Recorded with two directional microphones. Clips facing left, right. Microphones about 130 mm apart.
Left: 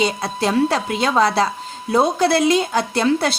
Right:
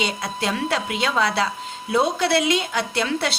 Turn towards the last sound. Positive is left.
turn(degrees=40)  # may be behind; listen again after turning